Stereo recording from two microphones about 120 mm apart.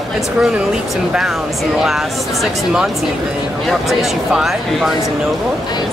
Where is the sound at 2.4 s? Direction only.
5° right (ahead or behind).